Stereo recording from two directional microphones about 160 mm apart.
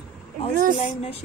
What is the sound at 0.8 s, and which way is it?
Music, 40° left (ahead or behind).